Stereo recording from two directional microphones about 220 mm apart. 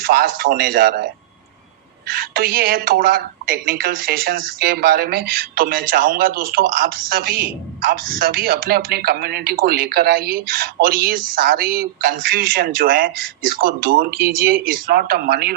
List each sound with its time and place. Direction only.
0.0 s a man's voice: 40° right (ahead or behind)
2.0 s a woman's voice: 40° right (ahead or behind)